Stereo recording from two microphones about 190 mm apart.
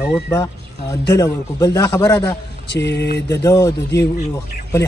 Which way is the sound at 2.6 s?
65° left (ahead or behind).